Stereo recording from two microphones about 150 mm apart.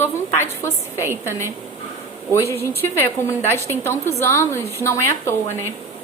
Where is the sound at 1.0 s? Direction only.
15° right (ahead or behind).